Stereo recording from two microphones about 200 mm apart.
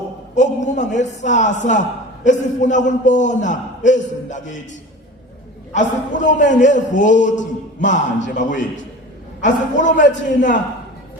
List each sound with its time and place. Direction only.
0.3 s a man's voice: 35° left (ahead or behind)
5.7 s a man's voice: 40° left (ahead or behind)